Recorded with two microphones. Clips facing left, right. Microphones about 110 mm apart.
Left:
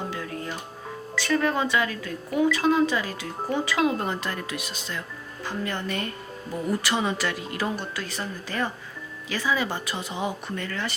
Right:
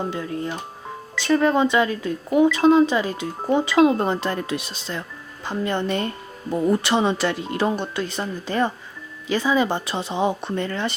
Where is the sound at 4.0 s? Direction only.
30° right (ahead or behind).